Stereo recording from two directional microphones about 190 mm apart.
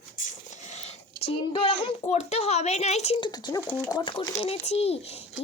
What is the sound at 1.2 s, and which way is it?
A child's voice, 30° left (ahead or behind).